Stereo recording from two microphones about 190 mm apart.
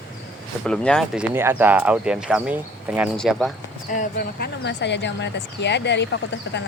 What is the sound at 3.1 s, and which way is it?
Speech, 5° left (ahead or behind).